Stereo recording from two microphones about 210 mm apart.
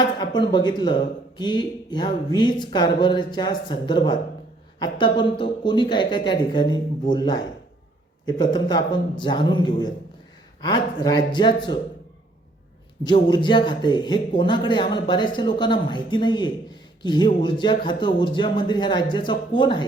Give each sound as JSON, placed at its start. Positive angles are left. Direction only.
{"t": 0.0, "sound": "speech", "side_deg": 20}
{"t": 13.1, "sound": "speech", "side_deg": 20}